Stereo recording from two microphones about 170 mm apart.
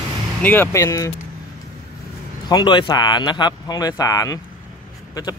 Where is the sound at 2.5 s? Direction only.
25° left (ahead or behind).